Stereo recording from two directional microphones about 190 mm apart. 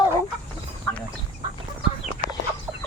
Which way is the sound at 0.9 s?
10° left (ahead or behind).